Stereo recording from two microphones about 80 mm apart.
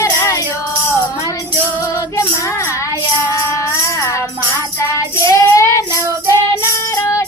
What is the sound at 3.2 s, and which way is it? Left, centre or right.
Music, left.